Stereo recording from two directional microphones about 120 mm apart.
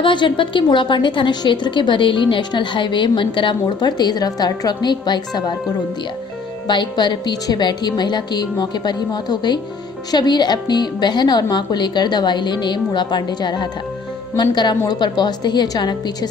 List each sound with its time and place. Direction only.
0.0 s a woman's voice: 40° left (ahead or behind)
6.7 s a woman's voice: 40° left (ahead or behind)